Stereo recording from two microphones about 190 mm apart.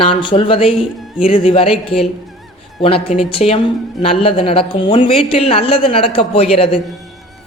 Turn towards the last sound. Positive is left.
turn(degrees=30)  # may be behind; listen again after turning